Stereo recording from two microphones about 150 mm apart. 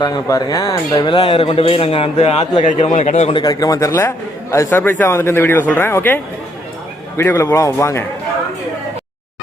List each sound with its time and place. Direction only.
0.0 s speech: 25° left (ahead or behind); by 3.3 s 45° left (ahead or behind)
3.3 s speech: 25° left (ahead or behind)
7.2 s speech: 15° left (ahead or behind)